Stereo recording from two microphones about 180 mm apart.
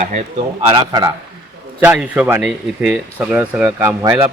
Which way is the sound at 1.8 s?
10° right (ahead or behind).